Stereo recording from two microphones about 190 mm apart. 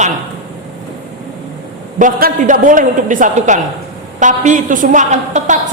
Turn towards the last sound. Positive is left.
turn(degrees=-40)  # may be behind; listen again after turning